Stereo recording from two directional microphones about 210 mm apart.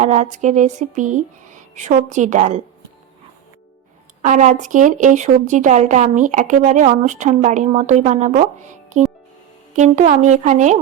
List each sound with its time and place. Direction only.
0.0 s speech: 35° right (ahead or behind)
4.2 s speech: 35° right (ahead or behind)
8.9 s music: 35° right (ahead or behind)
9.7 s speech: 35° right (ahead or behind)